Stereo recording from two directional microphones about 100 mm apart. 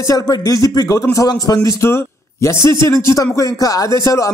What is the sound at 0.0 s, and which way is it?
A man's voice, 40° left (ahead or behind).